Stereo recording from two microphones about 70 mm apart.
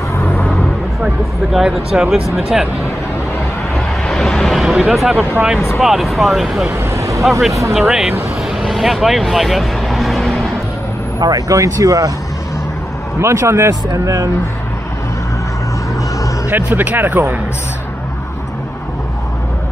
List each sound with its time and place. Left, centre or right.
0.2 s vehicle: left
1.5 s speech: centre
3.7 s speech: centre
6.8 s vehicle: right
7.4 s speech: centre
8.6 s vehicle: centre
11.1 s speech: right
13.2 s speech: right
16.4 s speech: right